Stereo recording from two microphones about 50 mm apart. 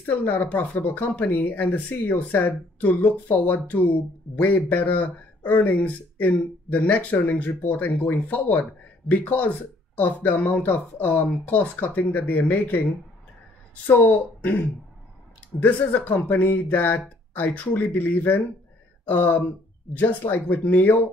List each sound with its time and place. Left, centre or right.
0.1 s speech: left
15.6 s speech: left